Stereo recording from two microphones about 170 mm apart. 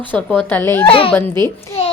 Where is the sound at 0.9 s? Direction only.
30° left (ahead or behind).